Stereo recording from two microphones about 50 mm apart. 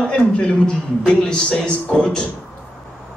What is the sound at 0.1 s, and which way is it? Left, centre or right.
A man's voice, centre.